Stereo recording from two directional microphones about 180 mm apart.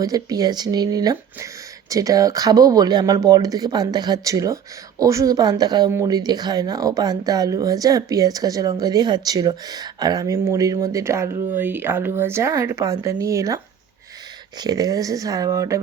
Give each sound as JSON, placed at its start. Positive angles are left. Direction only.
{"t": 0.0, "sound": "speech", "side_deg": -20}
{"t": 14.6, "sound": "speech", "side_deg": -20}